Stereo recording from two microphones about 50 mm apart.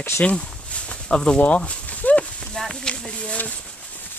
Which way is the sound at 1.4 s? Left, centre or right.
Left.